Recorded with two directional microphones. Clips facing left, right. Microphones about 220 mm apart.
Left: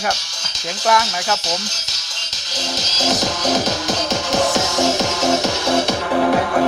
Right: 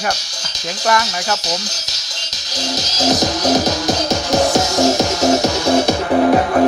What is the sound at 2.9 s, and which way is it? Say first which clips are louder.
Music: right 4 dB; 40° right (ahead or behind).